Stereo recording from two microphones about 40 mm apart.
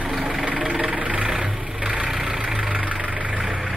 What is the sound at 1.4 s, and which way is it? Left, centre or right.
Vehicle, right.